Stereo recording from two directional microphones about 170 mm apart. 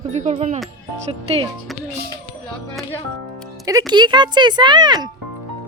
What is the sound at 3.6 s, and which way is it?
Speech, 25° right (ahead or behind).